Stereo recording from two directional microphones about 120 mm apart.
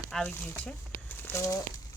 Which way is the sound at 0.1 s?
5° left (ahead or behind).